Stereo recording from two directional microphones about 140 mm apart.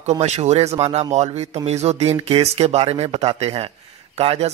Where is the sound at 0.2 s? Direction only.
50° right (ahead or behind).